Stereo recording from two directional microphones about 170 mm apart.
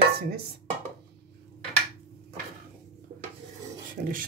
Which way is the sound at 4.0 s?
50° right (ahead or behind).